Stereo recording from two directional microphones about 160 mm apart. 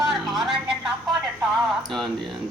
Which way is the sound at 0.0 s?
Centre (ahead or behind).